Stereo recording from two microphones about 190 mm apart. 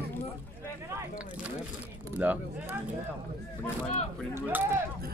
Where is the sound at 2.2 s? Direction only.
10° right (ahead or behind).